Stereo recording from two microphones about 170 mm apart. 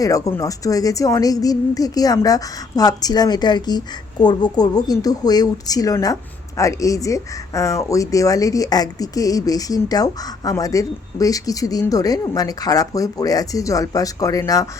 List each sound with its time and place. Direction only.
0.0 s speech: 20° left (ahead or behind)